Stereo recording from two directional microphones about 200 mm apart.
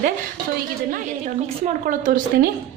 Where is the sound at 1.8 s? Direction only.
45° right (ahead or behind).